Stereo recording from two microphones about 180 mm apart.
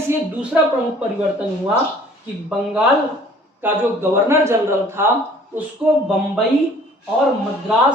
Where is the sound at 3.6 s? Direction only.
10° right (ahead or behind).